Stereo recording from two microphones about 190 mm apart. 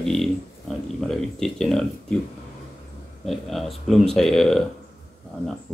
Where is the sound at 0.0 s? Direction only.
Centre (ahead or behind).